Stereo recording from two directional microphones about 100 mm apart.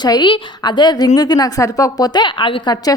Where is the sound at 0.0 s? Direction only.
45° left (ahead or behind).